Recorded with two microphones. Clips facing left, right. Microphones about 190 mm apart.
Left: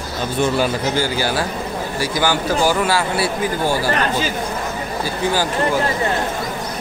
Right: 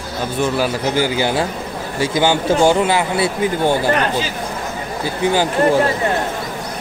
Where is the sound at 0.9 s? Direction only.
20° right (ahead or behind).